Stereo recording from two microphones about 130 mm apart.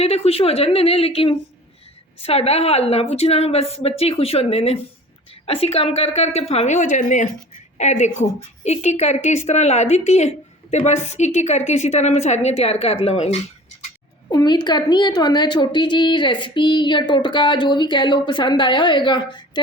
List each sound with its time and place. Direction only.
0.0 s a woman's voice: 50° left (ahead or behind)
14.3 s a woman's voice: 30° left (ahead or behind)